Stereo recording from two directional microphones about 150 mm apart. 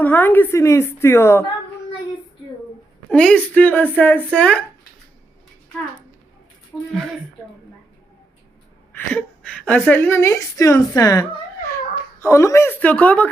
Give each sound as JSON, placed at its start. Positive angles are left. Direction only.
{"t": 0.0, "sound": "speech", "side_deg": 10}
{"t": 3.1, "sound": "speech", "side_deg": 5}
{"t": 6.7, "sound": "speech", "side_deg": 25}
{"t": 8.9, "sound": "a woman's voice", "side_deg": 10}